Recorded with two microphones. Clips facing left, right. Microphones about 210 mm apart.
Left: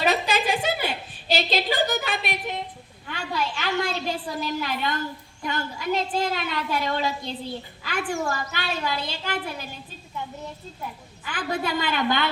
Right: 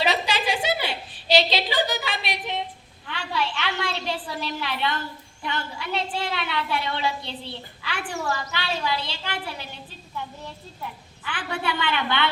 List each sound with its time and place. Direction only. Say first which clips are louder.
0.0 s a sound: left 1 dB; 45° left (ahead or behind)
3.1 s a woman's voice: even; 45° left (ahead or behind)
11.3 s a woman's voice: left 2 dB; 40° left (ahead or behind)